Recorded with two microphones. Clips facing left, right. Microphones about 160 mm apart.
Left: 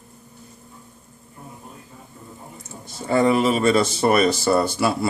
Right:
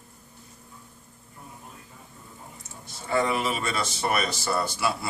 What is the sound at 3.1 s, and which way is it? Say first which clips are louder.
Speech: left 8 dB; 35° left (ahead or behind).